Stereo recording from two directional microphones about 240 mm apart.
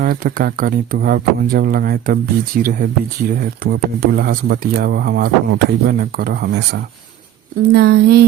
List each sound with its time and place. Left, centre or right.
0.0 s speech: right